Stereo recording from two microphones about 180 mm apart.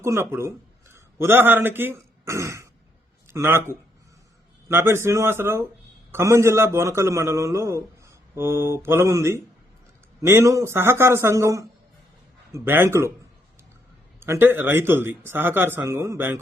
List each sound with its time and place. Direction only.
0.0 s a man's voice: 15° right (ahead or behind)
14.2 s speech: 15° right (ahead or behind)